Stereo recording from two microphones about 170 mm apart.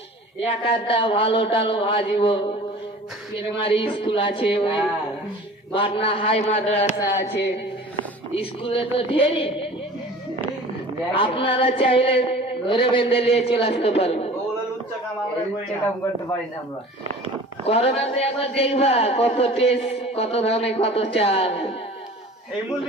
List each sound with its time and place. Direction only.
0.3 s speech: 30° left (ahead or behind)
3.6 s speech: 30° left (ahead or behind)
8.4 s speech: 30° left (ahead or behind)
11.1 s speech: 30° left (ahead or behind)
17.7 s speech: 35° left (ahead or behind)